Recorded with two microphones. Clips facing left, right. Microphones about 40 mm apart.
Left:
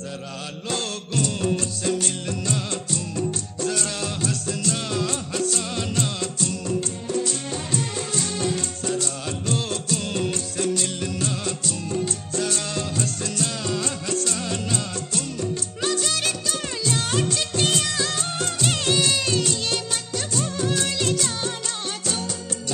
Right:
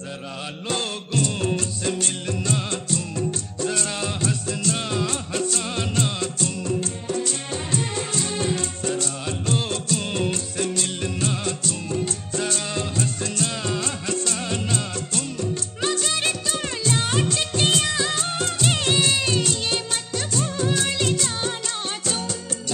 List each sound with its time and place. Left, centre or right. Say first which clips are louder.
0.7 s music of bollywood: right 1 dB; right
2.0 s music of bollywood: right 1 dB; centre
3.6 s music of bollywood: right 1 dB; right
7.7 s music: right 1 dB; right
8.9 s music of bollywood: even; right
12.6 s music of bollywood: right 1 dB; centre
13.4 s music: even; right
15.8 s music of bollywood: right 1 dB; centre